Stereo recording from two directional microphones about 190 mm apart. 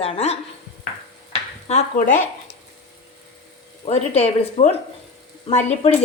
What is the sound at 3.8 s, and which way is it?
A woman's voice, 35° left (ahead or behind).